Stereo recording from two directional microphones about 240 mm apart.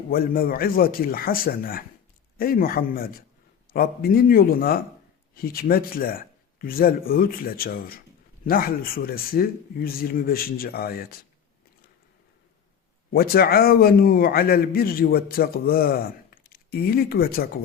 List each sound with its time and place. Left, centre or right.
0.1 s a man's voice: left
13.1 s a man's voice: left